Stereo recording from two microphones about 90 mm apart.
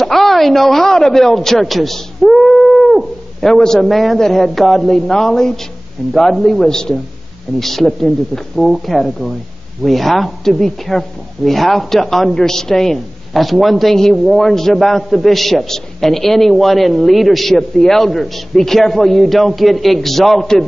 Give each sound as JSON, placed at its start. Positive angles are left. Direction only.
{"t": 0.0, "sound": "a woman's voice", "side_deg": 0}